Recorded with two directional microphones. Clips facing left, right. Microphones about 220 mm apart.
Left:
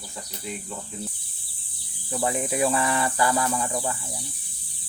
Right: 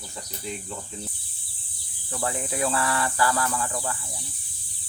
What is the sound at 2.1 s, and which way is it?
Speech, 20° left (ahead or behind).